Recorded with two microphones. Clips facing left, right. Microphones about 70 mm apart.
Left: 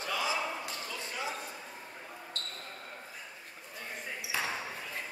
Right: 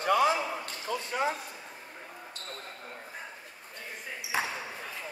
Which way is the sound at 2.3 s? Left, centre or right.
Centre.